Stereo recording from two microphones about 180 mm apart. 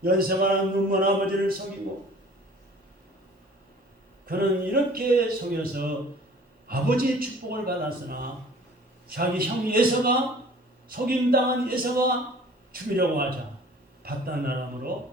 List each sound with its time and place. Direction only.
0.0 s a man's voice: 55° right (ahead or behind)
4.3 s a man's voice: 55° right (ahead or behind)